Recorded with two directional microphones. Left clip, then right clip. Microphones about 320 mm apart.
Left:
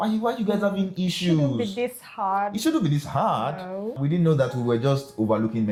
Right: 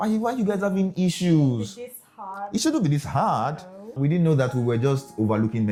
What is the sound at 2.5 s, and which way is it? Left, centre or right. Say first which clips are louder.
Speech: even; right.